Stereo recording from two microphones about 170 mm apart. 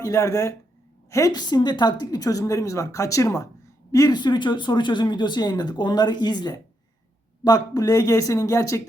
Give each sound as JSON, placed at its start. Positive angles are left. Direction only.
{"t": 0.0, "sound": "speech", "side_deg": 15}